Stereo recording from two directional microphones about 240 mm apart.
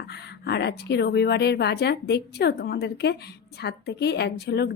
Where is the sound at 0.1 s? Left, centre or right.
Left.